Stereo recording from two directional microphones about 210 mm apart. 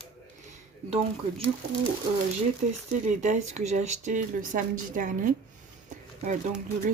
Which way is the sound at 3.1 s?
35° right (ahead or behind).